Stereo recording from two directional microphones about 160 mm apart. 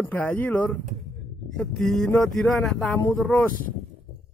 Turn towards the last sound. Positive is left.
turn(degrees=5)  # may be behind; listen again after turning